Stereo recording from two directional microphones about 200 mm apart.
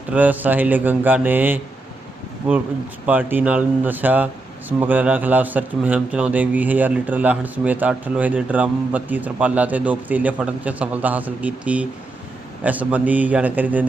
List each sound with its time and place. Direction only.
0.1 s a man's voice: 10° right (ahead or behind)
3.1 s a man's voice: 10° right (ahead or behind)